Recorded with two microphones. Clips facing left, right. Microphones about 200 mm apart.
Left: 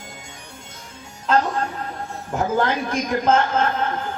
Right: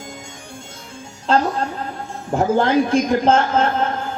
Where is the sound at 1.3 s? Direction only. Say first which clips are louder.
Right 2 dB; 30° right (ahead or behind).